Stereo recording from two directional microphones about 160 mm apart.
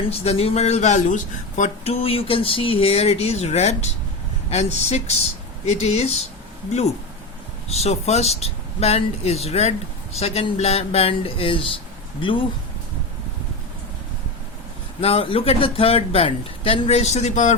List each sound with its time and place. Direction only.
0.1 s speech: 40° left (ahead or behind)
7.7 s speech: 40° left (ahead or behind)
15.0 s speech: 35° left (ahead or behind)